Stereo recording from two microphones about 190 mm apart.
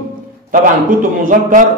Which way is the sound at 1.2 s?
45° right (ahead or behind).